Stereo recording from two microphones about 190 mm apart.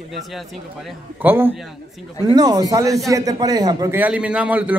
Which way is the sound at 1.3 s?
10° right (ahead or behind).